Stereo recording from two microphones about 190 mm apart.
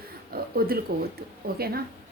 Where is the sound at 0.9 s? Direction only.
55° right (ahead or behind).